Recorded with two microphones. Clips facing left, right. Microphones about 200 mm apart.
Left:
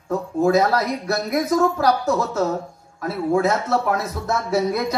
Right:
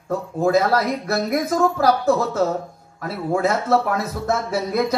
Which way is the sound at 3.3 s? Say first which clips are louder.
Right 1 dB; 50° right (ahead or behind).